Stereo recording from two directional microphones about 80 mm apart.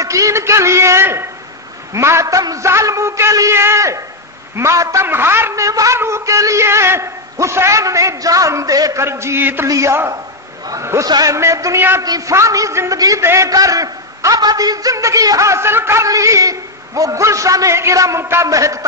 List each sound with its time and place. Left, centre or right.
0.0 s a man's voice: right
5.0 s a man's voice: right
9.0 s a man's voice: right
9.7 s a man's voice: right
12.0 s a man's voice: right
12.4 s a man's voice: right
13.2 s a man's voice: right
13.5 s a man's voice: right
16.1 s a man's voice: right